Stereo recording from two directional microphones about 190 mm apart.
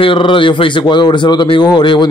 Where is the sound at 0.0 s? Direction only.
25° left (ahead or behind).